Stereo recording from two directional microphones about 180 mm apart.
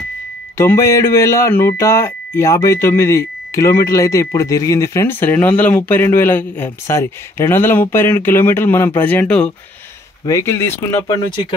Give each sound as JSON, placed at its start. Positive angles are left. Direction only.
{"t": 0.6, "sound": "speech", "side_deg": 15}